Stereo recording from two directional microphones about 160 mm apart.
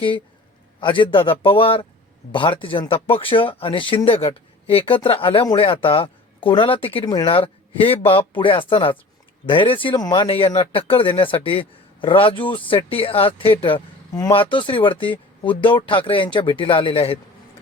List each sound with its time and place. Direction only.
0.8 s speech: 30° left (ahead or behind)